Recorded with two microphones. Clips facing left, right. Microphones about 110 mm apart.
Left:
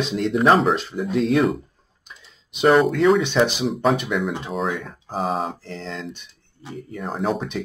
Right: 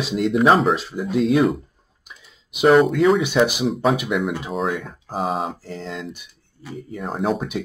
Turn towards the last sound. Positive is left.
turn(degrees=-5)  # may be behind; listen again after turning